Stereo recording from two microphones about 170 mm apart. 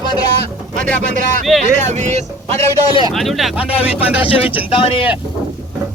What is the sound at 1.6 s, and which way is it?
Speech, 45° right (ahead or behind).